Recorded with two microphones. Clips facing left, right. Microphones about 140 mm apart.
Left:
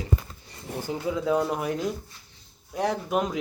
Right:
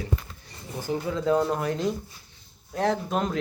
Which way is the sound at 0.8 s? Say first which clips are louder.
Right 1 dB; 15° left (ahead or behind).